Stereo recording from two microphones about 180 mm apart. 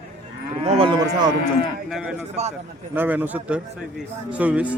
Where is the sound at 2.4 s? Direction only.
35° right (ahead or behind).